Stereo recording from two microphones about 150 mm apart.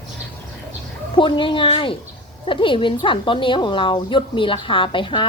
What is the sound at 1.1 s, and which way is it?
A woman's voice, 35° left (ahead or behind).